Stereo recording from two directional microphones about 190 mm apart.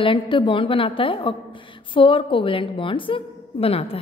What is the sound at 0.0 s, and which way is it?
A woman's voice, 25° left (ahead or behind).